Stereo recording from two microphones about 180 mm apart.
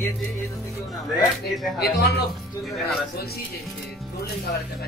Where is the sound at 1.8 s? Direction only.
60° left (ahead or behind).